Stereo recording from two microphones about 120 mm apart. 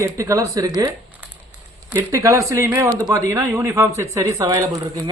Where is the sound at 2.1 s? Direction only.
25° right (ahead or behind).